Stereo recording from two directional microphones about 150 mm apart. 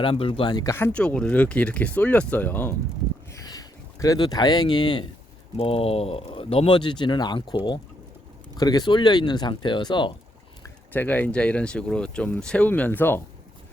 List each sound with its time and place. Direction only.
0.0 s speech: 35° left (ahead or behind); by 2.7 s 10° left (ahead or behind)
3.3 s speech: 25° left (ahead or behind)
10.9 s speech: 10° left (ahead or behind)